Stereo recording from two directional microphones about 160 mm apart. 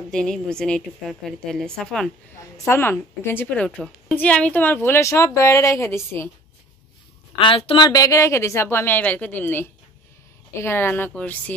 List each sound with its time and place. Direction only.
0.1 s a woman's voice: 5° left (ahead or behind)
2.5 s speech: 15° left (ahead or behind)
7.3 s speech: 35° left (ahead or behind); by 11.5 s 10° left (ahead or behind)